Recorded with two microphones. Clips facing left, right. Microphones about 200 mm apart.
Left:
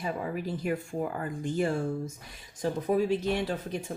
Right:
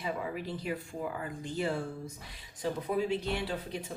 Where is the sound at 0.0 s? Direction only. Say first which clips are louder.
Left 3 dB; 45° left (ahead or behind).